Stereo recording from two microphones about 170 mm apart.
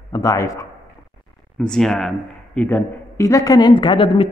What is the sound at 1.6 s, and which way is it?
A man's voice, 5° left (ahead or behind).